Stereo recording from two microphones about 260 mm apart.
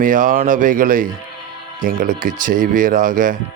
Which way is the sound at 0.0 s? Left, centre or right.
Right.